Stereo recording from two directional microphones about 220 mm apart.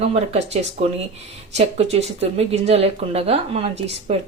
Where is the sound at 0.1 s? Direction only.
30° right (ahead or behind).